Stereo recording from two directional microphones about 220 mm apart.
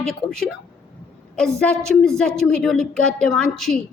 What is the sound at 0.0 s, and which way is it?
A woman's voice, centre (ahead or behind).